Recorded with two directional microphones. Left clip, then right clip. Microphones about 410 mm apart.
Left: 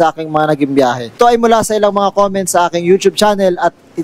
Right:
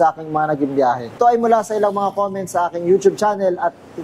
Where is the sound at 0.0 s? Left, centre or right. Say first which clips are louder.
Left 4 dB; left.